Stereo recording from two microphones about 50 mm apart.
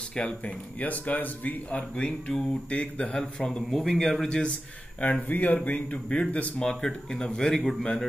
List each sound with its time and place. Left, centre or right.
0.1 s speech: left
5.3 s speech: left; by 8.0 s centre